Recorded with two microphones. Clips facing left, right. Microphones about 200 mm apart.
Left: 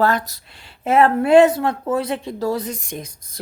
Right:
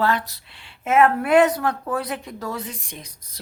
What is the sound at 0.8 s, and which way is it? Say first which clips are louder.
Speech: left 3 dB; 30° left (ahead or behind).